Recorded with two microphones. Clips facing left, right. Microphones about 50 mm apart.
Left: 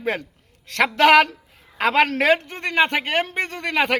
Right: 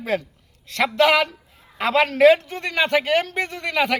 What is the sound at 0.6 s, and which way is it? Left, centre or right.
A woman's voice, left.